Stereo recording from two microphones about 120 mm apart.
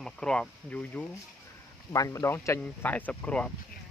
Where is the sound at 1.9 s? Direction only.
25° left (ahead or behind); by 3.5 s 10° left (ahead or behind).